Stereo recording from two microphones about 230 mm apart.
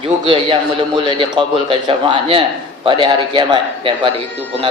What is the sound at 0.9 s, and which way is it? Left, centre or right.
A man's voice, right.